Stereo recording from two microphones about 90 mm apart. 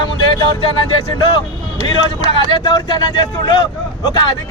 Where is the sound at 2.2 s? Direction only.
55° left (ahead or behind).